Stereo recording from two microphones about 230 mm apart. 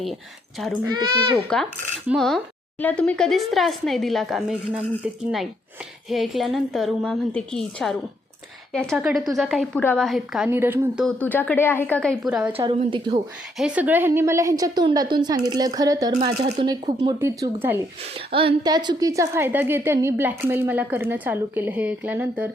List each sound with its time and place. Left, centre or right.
1.5 s speech: centre
6.1 s speech: centre
11.2 s a woman's voice: centre
12.5 s speech: right
13.6 s a woman's voice: centre
16.1 s speech: right; by 17.7 s centre
18.3 s a woman's voice: right; by 22.4 s centre